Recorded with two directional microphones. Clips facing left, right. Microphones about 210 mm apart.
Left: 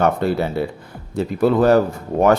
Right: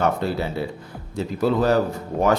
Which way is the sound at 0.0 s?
55° left (ahead or behind).